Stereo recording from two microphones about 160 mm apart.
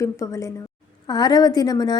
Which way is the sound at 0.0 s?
20° left (ahead or behind).